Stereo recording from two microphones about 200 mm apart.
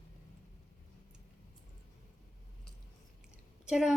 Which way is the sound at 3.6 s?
5° right (ahead or behind).